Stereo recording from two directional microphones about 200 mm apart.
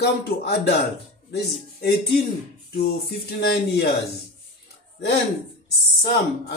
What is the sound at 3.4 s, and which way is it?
Speech, 55° left (ahead or behind).